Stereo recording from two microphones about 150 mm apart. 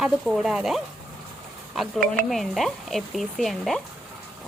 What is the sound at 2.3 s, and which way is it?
A woman's voice, centre (ahead or behind).